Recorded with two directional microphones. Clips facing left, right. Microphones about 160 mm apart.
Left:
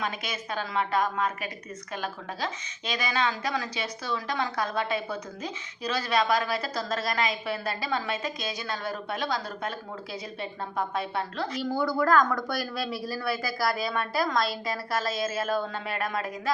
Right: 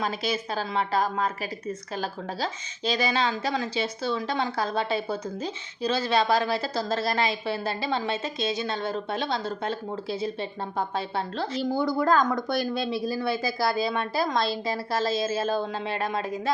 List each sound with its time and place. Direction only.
0.0 s a woman's voice: 30° right (ahead or behind)